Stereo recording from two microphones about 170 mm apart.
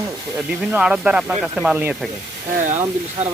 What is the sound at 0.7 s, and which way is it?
Speech, 5° right (ahead or behind).